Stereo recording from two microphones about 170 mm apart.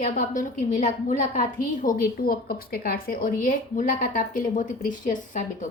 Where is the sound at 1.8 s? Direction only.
60° left (ahead or behind).